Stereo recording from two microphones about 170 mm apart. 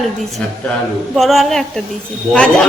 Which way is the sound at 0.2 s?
Centre (ahead or behind).